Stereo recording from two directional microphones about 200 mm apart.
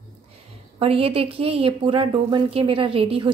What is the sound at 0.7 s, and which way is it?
A woman's voice, 30° right (ahead or behind).